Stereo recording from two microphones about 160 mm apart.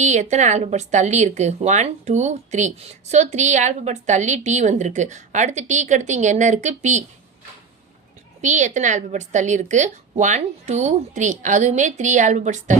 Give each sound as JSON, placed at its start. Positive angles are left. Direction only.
{"t": 0.0, "sound": "speech", "side_deg": -45}
{"t": 8.4, "sound": "speech", "side_deg": -50}